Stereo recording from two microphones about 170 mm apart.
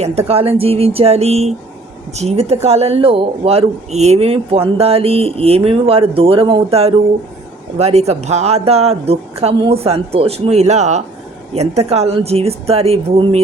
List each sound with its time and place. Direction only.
0.0 s speech: 35° right (ahead or behind)